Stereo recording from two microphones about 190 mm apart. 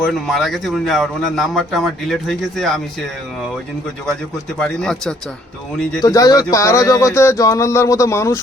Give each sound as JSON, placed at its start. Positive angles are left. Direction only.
{"t": 0.0, "sound": "a man's voice", "side_deg": 0}
{"t": 4.0, "sound": "a man's voice", "side_deg": 5}
{"t": 6.0, "sound": "speech", "side_deg": 20}